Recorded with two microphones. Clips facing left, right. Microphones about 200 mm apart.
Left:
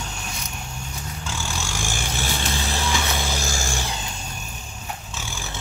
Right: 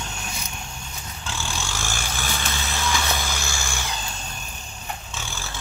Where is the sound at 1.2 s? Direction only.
10° left (ahead or behind); by 3.0 s 30° left (ahead or behind).